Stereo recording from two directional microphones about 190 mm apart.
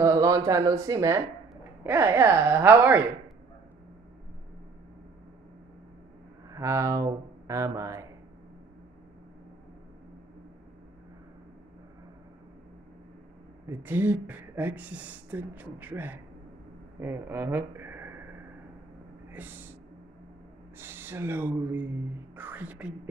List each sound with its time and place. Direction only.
0.0 s speech: 15° right (ahead or behind)
6.5 s speech: 15° right (ahead or behind)
13.7 s a man's voice: 10° right (ahead or behind)
19.2 s speech: 10° right (ahead or behind)
20.8 s speech: 10° right (ahead or behind)